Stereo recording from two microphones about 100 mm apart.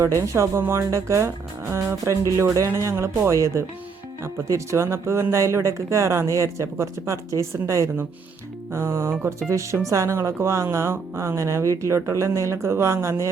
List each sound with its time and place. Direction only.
0.0 s speech: 30° right (ahead or behind)